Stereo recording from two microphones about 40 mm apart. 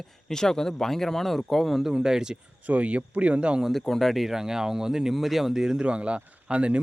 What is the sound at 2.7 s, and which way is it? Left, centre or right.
Speech, right.